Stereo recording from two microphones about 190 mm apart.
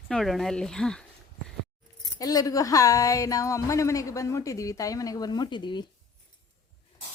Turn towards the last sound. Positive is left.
turn(degrees=25)  # may be behind; listen again after turning